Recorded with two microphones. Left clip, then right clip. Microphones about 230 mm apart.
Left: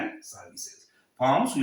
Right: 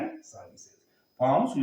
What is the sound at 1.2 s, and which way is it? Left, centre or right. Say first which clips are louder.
Speech: left 1 dB; left.